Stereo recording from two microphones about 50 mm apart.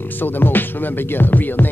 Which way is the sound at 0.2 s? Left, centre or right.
Left.